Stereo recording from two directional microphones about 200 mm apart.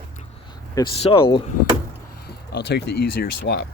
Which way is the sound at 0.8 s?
25° left (ahead or behind).